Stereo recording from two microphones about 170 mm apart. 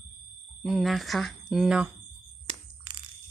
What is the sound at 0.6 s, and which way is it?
Speech, centre (ahead or behind).